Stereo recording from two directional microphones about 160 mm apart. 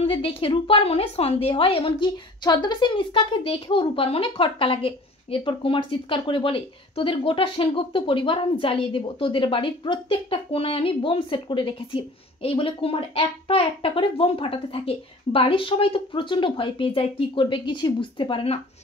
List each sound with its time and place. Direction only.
0.0 s a woman's voice: 35° left (ahead or behind)